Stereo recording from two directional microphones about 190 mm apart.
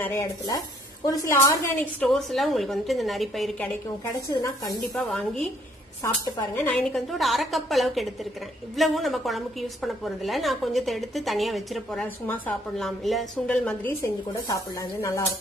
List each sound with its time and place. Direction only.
0.0 s a woman's voice: 15° left (ahead or behind)
4.1 s a woman's voice: 20° left (ahead or behind)
4.9 s a woman's voice: 5° left (ahead or behind)
6.0 s a woman's voice: 15° left (ahead or behind)